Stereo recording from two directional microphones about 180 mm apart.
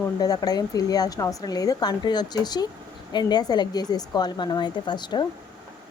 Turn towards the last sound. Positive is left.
turn(degrees=25)  # may be behind; listen again after turning